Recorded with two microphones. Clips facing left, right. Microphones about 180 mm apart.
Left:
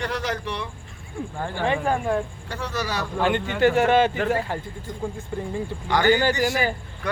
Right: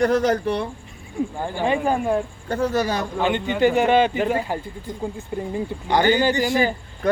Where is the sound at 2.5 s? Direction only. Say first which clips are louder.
Right 10 dB; 50° right (ahead or behind).